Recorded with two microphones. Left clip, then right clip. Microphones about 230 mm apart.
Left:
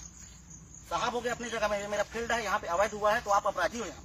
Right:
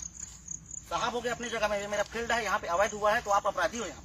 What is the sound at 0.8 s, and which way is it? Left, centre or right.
A man's voice, centre.